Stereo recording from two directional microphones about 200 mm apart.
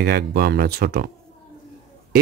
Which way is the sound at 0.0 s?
50° right (ahead or behind).